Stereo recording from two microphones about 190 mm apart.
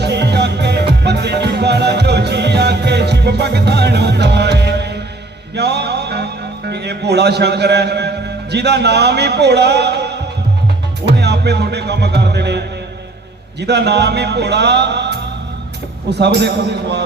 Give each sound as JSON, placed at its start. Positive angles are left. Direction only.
{"t": 0.0, "sound": "music", "side_deg": -60}
{"t": 6.7, "sound": "a man's voice", "side_deg": -60}
{"t": 11.2, "sound": "music", "side_deg": -60}